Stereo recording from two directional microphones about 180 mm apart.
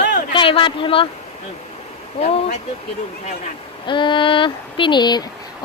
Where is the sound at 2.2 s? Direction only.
35° left (ahead or behind).